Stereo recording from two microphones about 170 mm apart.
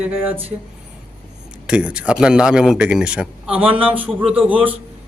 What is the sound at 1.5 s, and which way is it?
Speech, 5° right (ahead or behind).